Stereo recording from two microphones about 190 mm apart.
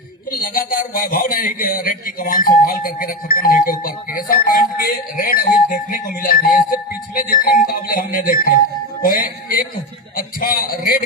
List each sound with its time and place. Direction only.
0.3 s a man's voice: 50° left (ahead or behind)